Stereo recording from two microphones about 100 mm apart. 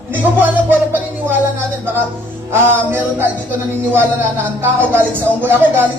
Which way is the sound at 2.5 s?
20° right (ahead or behind).